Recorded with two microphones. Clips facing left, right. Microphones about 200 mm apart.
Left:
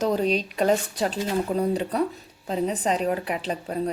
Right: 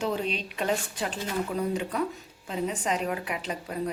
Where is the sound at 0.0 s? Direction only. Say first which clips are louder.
Left 7 dB; 40° left (ahead or behind).